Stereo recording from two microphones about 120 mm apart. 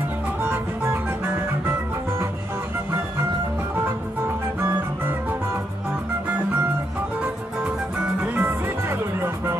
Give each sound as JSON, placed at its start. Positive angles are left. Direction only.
{"t": 0.4, "sound": "music", "side_deg": -20}
{"t": 8.2, "sound": "music", "side_deg": -15}